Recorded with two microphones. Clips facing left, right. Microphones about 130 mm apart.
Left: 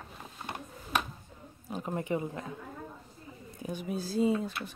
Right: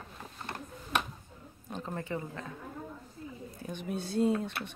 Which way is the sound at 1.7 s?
15° left (ahead or behind).